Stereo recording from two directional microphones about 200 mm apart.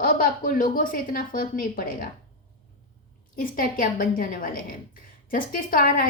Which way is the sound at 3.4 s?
45° left (ahead or behind).